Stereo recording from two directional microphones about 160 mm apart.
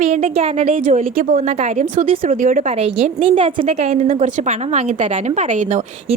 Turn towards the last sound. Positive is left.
turn(degrees=-50)  # may be behind; listen again after turning